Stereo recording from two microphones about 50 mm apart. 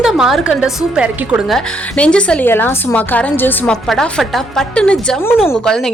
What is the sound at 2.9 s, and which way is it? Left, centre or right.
Speech, left.